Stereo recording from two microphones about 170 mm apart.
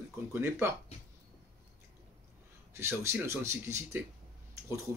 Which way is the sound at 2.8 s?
15° right (ahead or behind).